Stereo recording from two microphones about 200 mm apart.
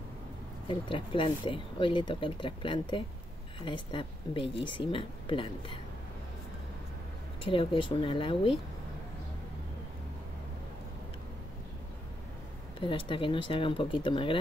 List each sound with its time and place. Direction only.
0.7 s speech: 25° left (ahead or behind)
7.4 s speech: 25° left (ahead or behind)
12.8 s speech: 25° left (ahead or behind)